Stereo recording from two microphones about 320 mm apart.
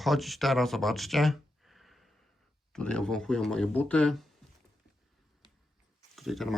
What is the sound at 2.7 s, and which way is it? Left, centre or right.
Speech, centre.